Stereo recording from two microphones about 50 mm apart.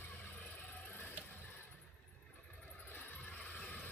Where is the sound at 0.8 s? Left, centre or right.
Left.